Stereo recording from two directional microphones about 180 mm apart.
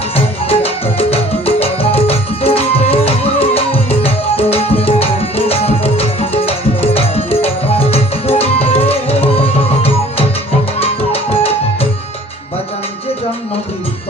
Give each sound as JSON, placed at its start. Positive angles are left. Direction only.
{"t": 0.4, "sound": "music", "side_deg": 35}
{"t": 5.5, "sound": "tabla", "side_deg": 35}
{"t": 10.8, "sound": "music", "side_deg": 35}